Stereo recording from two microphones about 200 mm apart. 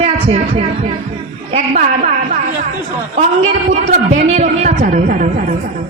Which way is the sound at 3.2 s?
35° right (ahead or behind).